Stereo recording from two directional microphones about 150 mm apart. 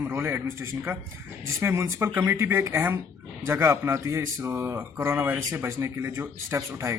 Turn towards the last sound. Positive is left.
turn(degrees=-20)  # may be behind; listen again after turning